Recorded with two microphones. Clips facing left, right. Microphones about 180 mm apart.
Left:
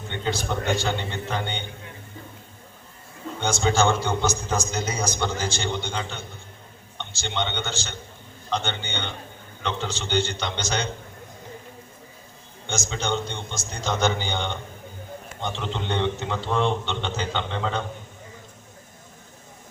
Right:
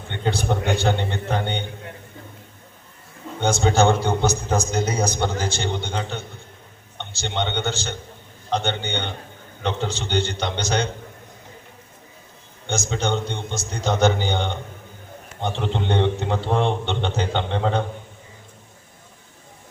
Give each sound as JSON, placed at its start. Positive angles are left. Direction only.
{"t": 0.1, "sound": "a man's voice", "side_deg": -60}
{"t": 3.4, "sound": "a man's voice", "side_deg": -55}
{"t": 12.6, "sound": "a man's voice", "side_deg": -60}